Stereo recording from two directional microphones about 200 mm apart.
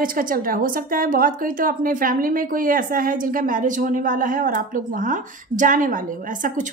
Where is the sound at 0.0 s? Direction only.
45° right (ahead or behind).